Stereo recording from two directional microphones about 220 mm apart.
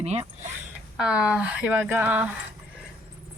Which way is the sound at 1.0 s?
5° right (ahead or behind).